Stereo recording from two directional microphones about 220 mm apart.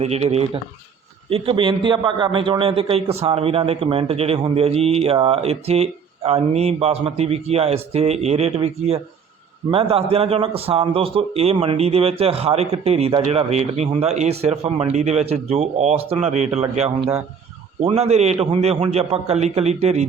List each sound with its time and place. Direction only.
0.0 s a man's voice: 30° right (ahead or behind)